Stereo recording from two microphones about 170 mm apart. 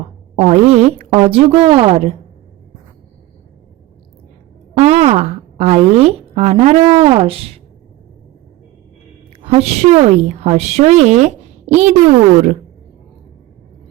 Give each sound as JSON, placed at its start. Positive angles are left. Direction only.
{"t": 0.3, "sound": "a woman's voice", "side_deg": -40}
{"t": 4.7, "sound": "a woman's voice", "side_deg": -40}
{"t": 9.4, "sound": "a woman's voice", "side_deg": -35}